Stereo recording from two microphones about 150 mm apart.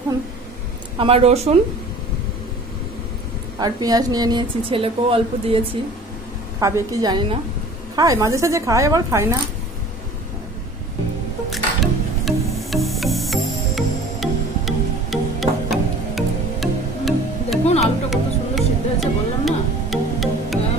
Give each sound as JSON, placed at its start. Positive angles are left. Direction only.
{"t": 0.9, "sound": "speech", "side_deg": -40}
{"t": 3.5, "sound": "a woman's voice", "side_deg": -25}
{"t": 6.6, "sound": "a woman's voice", "side_deg": -25}
{"t": 11.5, "sound": "music", "side_deg": 0}